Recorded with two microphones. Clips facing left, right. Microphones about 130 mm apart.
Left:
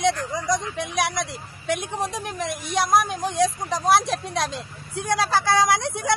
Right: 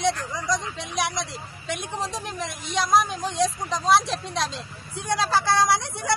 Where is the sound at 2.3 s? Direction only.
55° left (ahead or behind).